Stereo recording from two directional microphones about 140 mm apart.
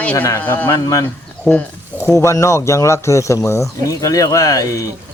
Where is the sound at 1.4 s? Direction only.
10° left (ahead or behind).